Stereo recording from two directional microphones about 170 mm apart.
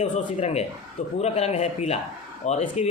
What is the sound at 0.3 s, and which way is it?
A man's voice, 40° left (ahead or behind).